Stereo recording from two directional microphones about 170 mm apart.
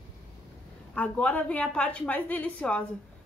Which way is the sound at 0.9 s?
10° left (ahead or behind).